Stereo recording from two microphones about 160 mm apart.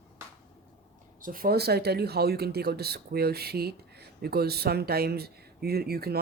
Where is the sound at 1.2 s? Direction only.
65° right (ahead or behind).